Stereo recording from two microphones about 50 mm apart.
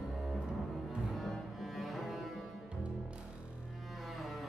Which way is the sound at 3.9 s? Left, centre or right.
Centre.